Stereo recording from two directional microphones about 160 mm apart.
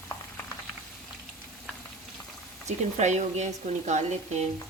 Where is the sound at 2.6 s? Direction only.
45° right (ahead or behind).